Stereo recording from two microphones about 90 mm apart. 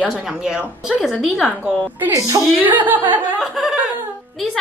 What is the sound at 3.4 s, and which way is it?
Speech, centre (ahead or behind).